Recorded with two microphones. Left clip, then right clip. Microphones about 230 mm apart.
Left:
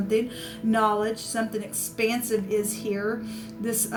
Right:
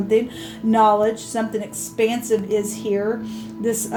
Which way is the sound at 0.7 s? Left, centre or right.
Left.